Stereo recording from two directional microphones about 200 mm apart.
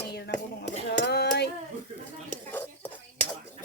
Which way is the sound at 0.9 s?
55° left (ahead or behind).